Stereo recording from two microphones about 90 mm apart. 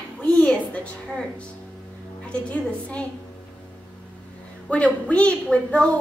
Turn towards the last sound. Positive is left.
turn(degrees=10)  # may be behind; listen again after turning